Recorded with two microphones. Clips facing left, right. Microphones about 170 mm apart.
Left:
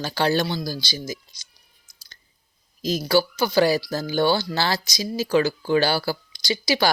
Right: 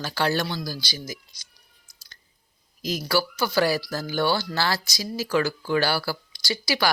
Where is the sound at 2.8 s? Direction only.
25° left (ahead or behind).